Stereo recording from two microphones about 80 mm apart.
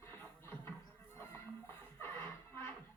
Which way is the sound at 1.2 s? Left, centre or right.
Left.